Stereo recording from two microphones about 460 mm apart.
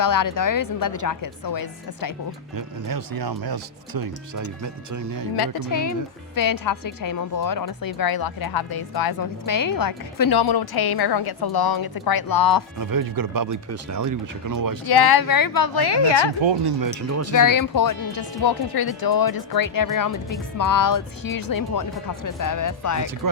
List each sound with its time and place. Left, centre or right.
0.0 s a woman's voice: left
2.6 s speech: right
5.4 s a woman's voice: left
12.8 s speech: right
14.8 s a woman's voice: left
16.4 s speech: right
16.8 s speech: right
17.3 s a woman's voice: left